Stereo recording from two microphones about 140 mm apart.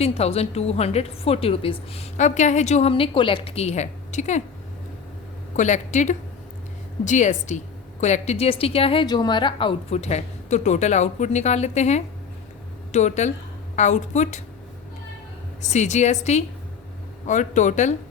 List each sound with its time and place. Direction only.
0.0 s a woman's voice: 45° left (ahead or behind)
2.9 s a woman's voice: 40° left (ahead or behind); by 4.4 s 55° left (ahead or behind)
5.5 s a woman's voice: 60° left (ahead or behind); by 9.7 s 35° left (ahead or behind)
9.9 s a woman's voice: 50° left (ahead or behind)
15.6 s a woman's voice: 55° left (ahead or behind)